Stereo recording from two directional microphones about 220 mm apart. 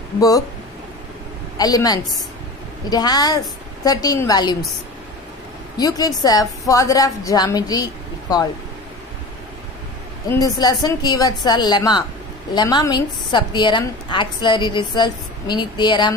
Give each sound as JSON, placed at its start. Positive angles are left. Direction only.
{"t": 1.6, "sound": "a woman's voice", "side_deg": 15}
{"t": 5.8, "sound": "a woman's voice", "side_deg": 15}
{"t": 10.3, "sound": "a woman's voice", "side_deg": 15}